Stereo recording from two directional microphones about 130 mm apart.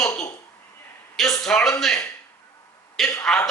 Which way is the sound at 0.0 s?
25° left (ahead or behind).